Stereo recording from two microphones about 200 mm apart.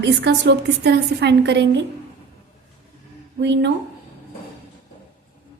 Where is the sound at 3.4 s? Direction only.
60° right (ahead or behind).